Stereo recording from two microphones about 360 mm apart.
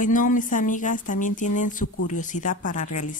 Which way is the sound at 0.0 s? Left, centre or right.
Left.